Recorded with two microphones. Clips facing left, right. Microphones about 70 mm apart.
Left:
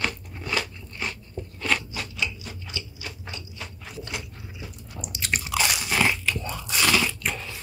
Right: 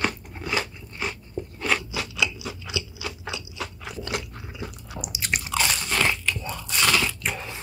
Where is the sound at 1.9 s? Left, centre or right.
Right.